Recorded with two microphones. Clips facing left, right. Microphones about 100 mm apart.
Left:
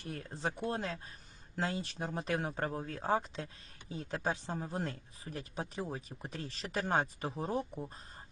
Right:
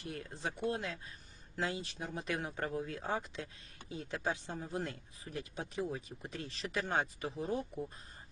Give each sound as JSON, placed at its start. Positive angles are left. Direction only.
{"t": 0.0, "sound": "speech", "side_deg": 35}